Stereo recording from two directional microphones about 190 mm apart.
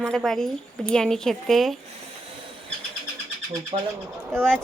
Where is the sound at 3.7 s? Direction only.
30° right (ahead or behind).